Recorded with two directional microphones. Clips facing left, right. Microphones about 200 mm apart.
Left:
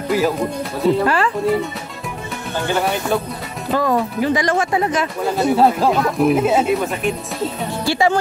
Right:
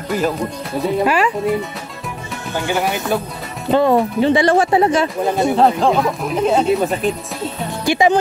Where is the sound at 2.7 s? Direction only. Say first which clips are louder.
Even; 15° right (ahead or behind).